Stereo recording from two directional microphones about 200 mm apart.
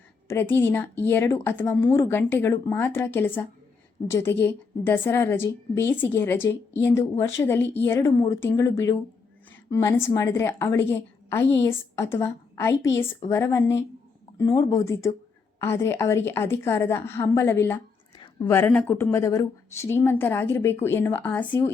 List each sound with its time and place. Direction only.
0.3 s a woman's voice: 10° left (ahead or behind)